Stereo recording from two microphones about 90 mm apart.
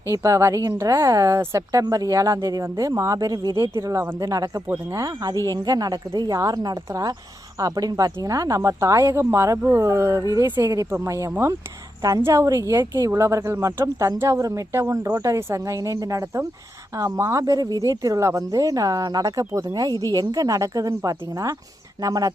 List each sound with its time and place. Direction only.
0.1 s a woman's voice: 35° right (ahead or behind)